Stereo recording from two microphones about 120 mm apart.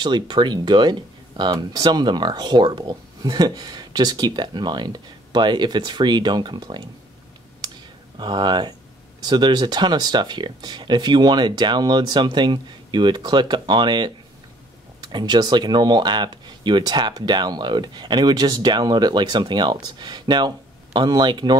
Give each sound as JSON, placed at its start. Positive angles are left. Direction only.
{"t": 0.0, "sound": "speech", "side_deg": -40}
{"t": 7.6, "sound": "clicking", "side_deg": -35}
{"t": 8.2, "sound": "speech", "side_deg": -40}